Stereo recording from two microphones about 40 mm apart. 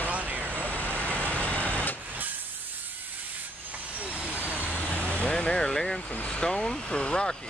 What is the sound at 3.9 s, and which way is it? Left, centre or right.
Vehicle, right.